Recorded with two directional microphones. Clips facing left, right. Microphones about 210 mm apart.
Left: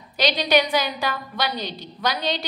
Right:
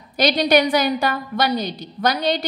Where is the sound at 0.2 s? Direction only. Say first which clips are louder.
Right 4 dB; 50° right (ahead or behind).